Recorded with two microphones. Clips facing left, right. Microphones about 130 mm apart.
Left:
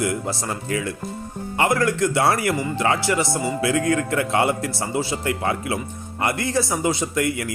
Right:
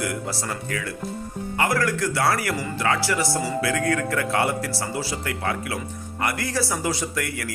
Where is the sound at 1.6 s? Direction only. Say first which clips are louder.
Left 3 dB; 25° left (ahead or behind).